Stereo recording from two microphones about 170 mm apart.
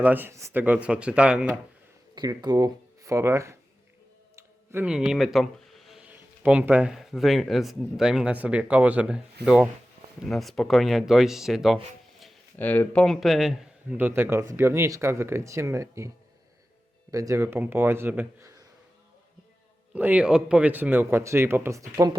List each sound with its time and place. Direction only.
0.0 s speech: 10° right (ahead or behind)
2.1 s speech: 25° right (ahead or behind)
4.7 s speech: 10° right (ahead or behind)
12.5 s speech: 10° left (ahead or behind); by 18.5 s 15° right (ahead or behind)
19.9 s speech: 10° right (ahead or behind)